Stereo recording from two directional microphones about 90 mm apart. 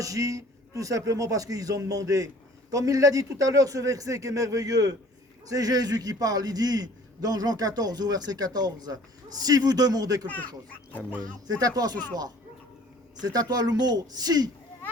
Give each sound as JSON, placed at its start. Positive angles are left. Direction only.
{"t": 0.0, "sound": "a man's voice", "side_deg": -40}
{"t": 10.2, "sound": "a child's voice", "side_deg": 15}
{"t": 11.2, "sound": "a man's voice", "side_deg": -45}
{"t": 13.2, "sound": "a man's voice", "side_deg": -45}